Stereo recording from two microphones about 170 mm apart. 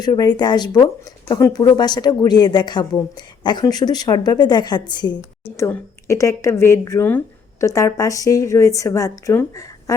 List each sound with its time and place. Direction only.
0.0 s speech: 25° left (ahead or behind)
5.1 s a woman's voice: 15° left (ahead or behind)